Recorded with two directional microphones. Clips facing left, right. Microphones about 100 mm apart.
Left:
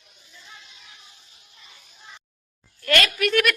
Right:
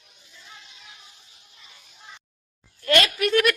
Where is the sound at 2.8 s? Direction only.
25° right (ahead or behind).